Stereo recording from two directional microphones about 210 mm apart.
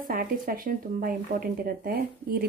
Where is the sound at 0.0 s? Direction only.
40° right (ahead or behind).